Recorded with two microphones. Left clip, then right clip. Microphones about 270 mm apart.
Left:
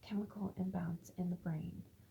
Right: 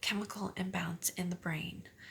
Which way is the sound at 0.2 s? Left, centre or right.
Right.